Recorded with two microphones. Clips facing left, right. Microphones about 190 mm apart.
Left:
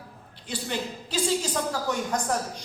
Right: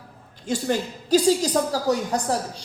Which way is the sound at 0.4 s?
45° right (ahead or behind).